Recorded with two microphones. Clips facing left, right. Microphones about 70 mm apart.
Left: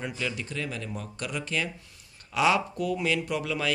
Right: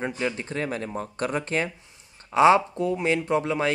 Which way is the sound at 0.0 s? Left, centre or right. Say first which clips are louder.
Right 5 dB; right.